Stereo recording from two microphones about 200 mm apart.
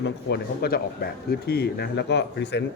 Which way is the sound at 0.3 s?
50° left (ahead or behind).